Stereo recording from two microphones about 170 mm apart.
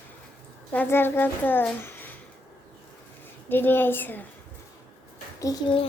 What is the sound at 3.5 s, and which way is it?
Speech, 10° left (ahead or behind).